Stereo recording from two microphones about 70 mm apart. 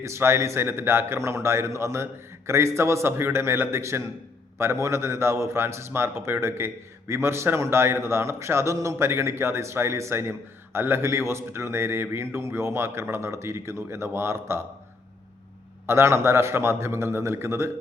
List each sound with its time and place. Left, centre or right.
0.0 s a man's voice: right
15.9 s a man's voice: right